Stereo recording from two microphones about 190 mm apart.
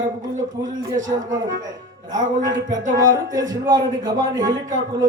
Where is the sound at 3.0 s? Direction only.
20° right (ahead or behind).